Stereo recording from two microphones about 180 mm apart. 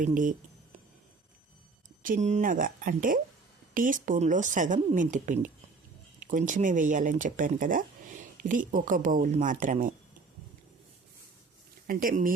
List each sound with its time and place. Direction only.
0.0 s speech: 45° right (ahead or behind)
2.0 s speech: 40° right (ahead or behind)
11.9 s speech: 50° right (ahead or behind)